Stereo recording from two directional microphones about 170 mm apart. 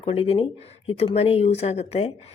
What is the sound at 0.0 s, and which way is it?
Speech, 35° left (ahead or behind).